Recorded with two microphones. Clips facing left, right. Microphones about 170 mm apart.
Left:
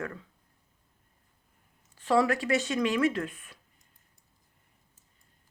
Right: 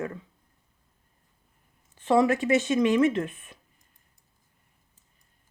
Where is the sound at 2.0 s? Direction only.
20° right (ahead or behind).